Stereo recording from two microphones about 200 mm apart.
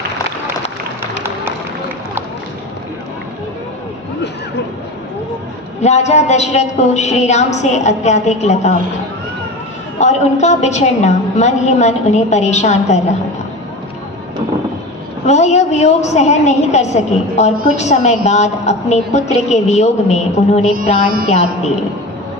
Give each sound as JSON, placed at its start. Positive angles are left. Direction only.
{"t": 5.8, "sound": "a woman's voice", "side_deg": 35}
{"t": 10.0, "sound": "a woman's voice", "side_deg": 35}
{"t": 15.3, "sound": "a woman's voice", "side_deg": 35}